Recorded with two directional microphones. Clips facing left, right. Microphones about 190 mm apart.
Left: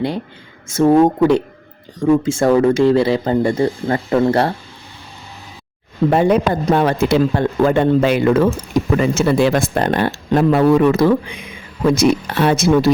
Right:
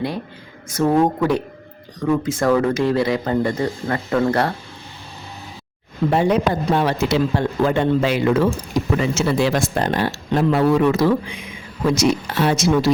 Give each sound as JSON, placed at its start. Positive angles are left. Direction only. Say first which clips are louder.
{"t": 0.7, "sound": "speech", "louder": "left 5 dB", "side_deg": 25}
{"t": 6.1, "sound": "a man's voice", "louder": "left 3 dB", "side_deg": 55}